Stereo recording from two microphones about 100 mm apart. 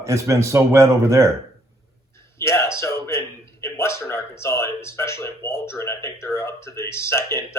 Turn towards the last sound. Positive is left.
turn(degrees=25)  # may be behind; listen again after turning